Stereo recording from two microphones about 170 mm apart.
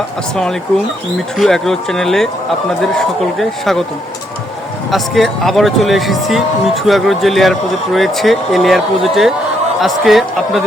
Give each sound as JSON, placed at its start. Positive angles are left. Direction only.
{"t": 1.4, "sound": "speech", "side_deg": 0}
{"t": 4.9, "sound": "speech", "side_deg": 0}